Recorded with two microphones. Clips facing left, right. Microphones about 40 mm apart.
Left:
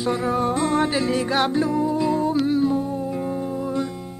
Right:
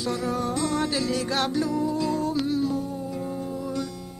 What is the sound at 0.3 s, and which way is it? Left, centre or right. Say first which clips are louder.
Music: left 6 dB; left.